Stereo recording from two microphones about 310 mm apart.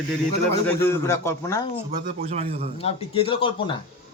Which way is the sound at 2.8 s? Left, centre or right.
Centre.